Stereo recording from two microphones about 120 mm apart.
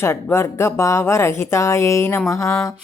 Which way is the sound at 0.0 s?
20° left (ahead or behind).